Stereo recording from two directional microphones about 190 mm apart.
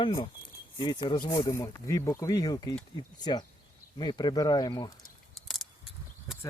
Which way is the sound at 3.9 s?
25° left (ahead or behind).